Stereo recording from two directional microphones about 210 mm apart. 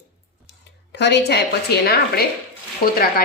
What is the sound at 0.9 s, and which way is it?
A woman's voice, 55° left (ahead or behind).